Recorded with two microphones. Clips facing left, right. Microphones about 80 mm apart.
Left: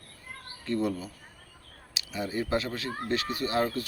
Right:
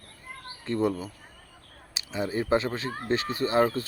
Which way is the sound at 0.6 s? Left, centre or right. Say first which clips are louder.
Right 3 dB; right.